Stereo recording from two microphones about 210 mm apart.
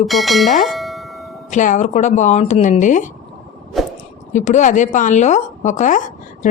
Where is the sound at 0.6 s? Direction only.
Centre (ahead or behind).